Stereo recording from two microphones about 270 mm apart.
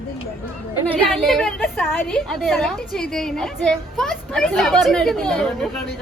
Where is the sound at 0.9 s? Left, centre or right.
Centre.